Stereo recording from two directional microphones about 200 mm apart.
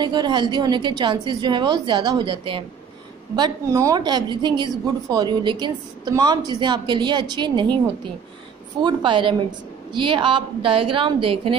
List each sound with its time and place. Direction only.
0.0 s a woman's voice: 20° right (ahead or behind)
8.8 s a woman's voice: 25° right (ahead or behind)